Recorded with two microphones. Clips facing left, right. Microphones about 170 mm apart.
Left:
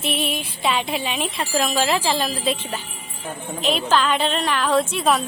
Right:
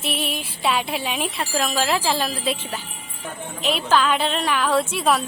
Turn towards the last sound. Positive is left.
turn(degrees=-5)  # may be behind; listen again after turning